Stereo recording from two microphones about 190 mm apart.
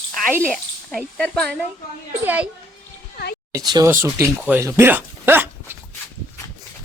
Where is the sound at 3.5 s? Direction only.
20° right (ahead or behind).